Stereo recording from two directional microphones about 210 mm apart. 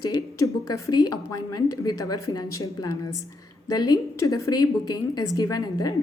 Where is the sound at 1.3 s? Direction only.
20° left (ahead or behind).